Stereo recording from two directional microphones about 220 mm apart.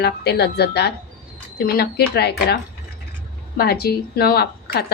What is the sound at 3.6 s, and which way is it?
Speech, 45° left (ahead or behind).